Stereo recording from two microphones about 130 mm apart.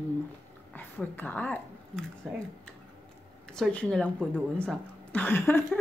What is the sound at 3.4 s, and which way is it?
A woman's voice, 5° left (ahead or behind).